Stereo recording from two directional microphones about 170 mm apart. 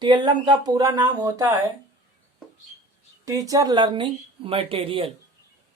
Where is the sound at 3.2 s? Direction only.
20° right (ahead or behind).